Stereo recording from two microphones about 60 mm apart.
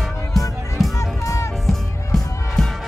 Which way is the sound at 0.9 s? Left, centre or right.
Left.